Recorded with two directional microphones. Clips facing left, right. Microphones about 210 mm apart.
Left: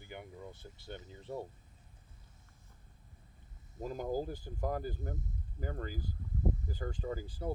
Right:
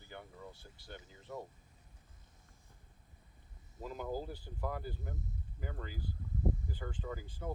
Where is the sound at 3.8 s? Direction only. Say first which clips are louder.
Left 4 dB; 45° left (ahead or behind).